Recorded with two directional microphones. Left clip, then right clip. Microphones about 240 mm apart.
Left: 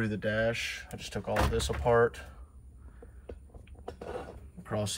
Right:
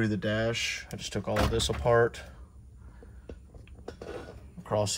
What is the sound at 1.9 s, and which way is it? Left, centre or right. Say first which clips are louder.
Speech: right 1 dB; centre.